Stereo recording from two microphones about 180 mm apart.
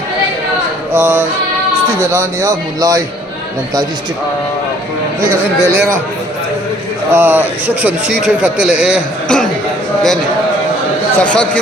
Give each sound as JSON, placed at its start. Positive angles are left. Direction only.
{"t": 0.9, "sound": "a man's voice", "side_deg": -10}
{"t": 5.2, "sound": "a man's voice", "side_deg": -15}
{"t": 7.1, "sound": "a man's voice", "side_deg": -10}
{"t": 11.2, "sound": "speech", "side_deg": 5}